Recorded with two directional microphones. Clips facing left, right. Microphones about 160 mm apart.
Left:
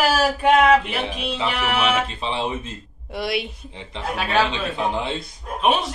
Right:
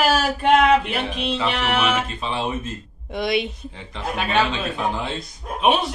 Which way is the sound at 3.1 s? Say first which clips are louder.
Right 3 dB; 5° left (ahead or behind).